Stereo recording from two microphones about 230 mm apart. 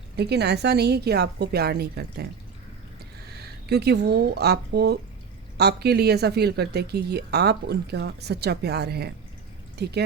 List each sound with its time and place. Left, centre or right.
0.2 s speech: right
3.3 s speech: right